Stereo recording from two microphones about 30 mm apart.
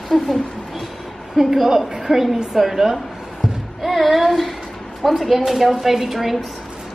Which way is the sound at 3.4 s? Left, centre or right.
Centre.